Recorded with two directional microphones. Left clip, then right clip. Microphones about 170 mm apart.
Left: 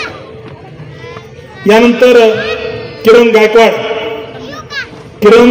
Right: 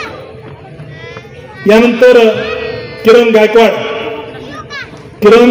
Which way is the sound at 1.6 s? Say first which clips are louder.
Even; 35° left (ahead or behind).